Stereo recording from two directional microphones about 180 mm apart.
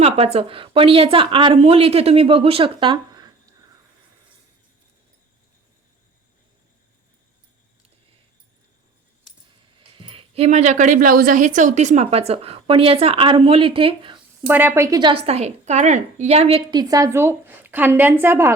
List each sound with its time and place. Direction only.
0.0 s a woman's voice: 35° right (ahead or behind)
10.0 s a woman's voice: 30° right (ahead or behind)
14.4 s a woman's voice: 10° right (ahead or behind)